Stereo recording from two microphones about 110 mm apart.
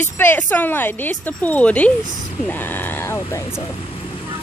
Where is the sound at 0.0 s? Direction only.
20° left (ahead or behind).